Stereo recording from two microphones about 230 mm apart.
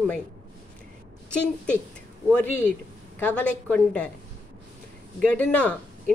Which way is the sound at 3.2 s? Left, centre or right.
Centre.